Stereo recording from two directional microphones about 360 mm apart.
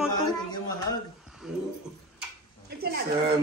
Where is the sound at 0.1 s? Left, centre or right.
Centre.